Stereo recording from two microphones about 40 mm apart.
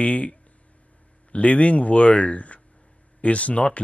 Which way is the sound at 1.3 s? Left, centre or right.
Left.